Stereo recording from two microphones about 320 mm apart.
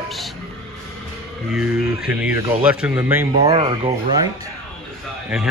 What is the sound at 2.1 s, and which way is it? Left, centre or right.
A man's voice, centre.